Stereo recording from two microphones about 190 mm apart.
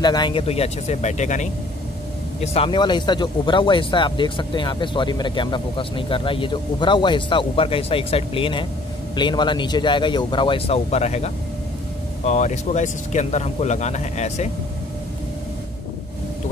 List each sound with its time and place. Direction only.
0.0 s speech: 25° left (ahead or behind)